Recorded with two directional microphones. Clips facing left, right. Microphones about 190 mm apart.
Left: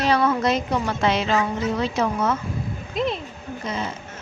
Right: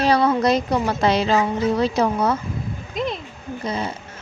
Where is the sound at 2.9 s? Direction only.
Centre (ahead or behind).